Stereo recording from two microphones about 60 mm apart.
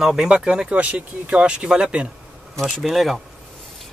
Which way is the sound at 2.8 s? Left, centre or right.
Centre.